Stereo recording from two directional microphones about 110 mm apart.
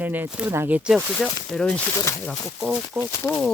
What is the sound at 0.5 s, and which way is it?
Speech, 20° right (ahead or behind).